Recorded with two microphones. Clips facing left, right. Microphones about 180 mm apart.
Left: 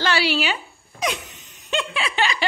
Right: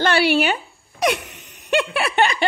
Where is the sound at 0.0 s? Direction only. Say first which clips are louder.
Right 5 dB; 55° right (ahead or behind).